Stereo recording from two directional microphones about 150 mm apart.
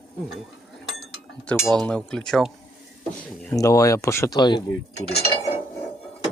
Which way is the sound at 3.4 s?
20° left (ahead or behind).